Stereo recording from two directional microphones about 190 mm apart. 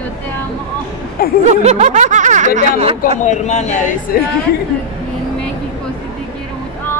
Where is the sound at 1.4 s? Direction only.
35° right (ahead or behind).